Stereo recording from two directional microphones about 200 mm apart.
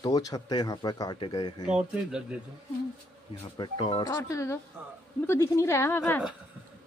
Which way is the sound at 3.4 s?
25° left (ahead or behind).